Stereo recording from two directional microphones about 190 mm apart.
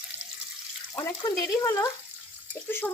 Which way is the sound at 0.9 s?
20° left (ahead or behind).